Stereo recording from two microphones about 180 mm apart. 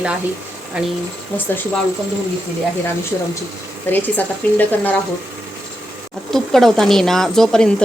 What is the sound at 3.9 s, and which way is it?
A woman's voice, 10° left (ahead or behind).